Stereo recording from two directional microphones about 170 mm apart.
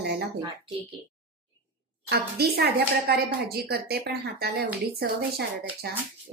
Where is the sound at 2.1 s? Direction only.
70° right (ahead or behind).